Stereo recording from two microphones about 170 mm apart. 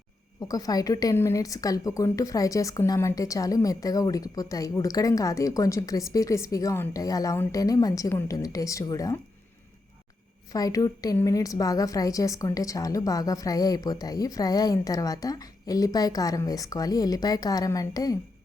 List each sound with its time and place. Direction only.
0.4 s a woman's voice: 20° left (ahead or behind)
10.5 s a woman's voice: 20° left (ahead or behind)